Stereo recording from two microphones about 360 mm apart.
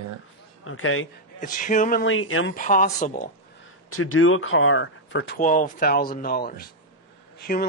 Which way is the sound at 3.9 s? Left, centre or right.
Left.